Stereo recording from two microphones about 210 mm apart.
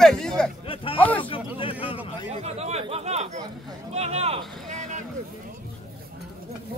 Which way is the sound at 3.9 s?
30° right (ahead or behind).